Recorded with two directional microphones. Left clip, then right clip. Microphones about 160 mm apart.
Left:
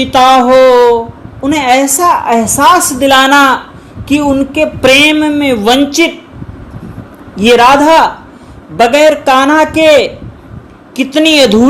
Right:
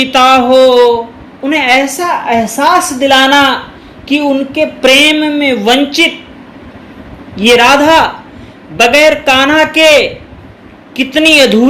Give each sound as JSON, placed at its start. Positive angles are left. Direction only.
{"t": 0.0, "sound": "a man's voice", "side_deg": 40}
{"t": 7.3, "sound": "a man's voice", "side_deg": 40}